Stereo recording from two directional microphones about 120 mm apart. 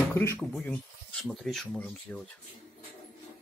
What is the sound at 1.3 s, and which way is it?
Speech, centre (ahead or behind).